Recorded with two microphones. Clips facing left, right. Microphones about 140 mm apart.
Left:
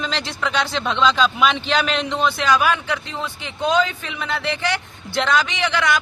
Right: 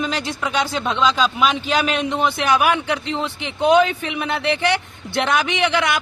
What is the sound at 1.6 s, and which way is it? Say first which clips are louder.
Speech: right 1 dB; 45° right (ahead or behind).